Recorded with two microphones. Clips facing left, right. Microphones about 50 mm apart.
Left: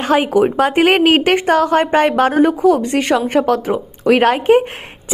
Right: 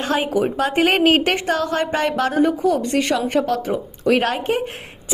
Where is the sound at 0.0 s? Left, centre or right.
Left.